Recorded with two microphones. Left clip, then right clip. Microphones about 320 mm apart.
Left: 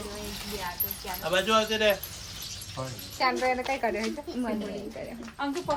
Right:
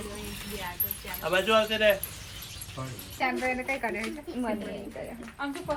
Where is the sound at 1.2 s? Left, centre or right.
Centre.